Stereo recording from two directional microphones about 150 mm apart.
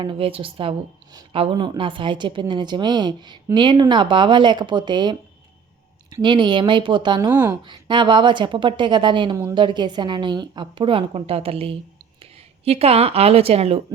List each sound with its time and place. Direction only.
0.0 s a woman's voice: 35° right (ahead or behind)
7.3 s speech: 10° right (ahead or behind)
7.6 s a woman's voice: 30° right (ahead or behind)